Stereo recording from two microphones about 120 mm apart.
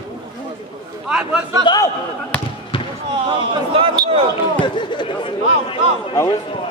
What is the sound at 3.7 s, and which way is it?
Speech, 45° right (ahead or behind).